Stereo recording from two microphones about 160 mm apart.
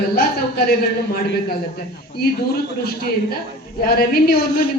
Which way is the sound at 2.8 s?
75° left (ahead or behind).